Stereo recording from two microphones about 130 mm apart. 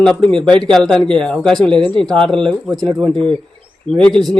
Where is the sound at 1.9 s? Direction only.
5° left (ahead or behind).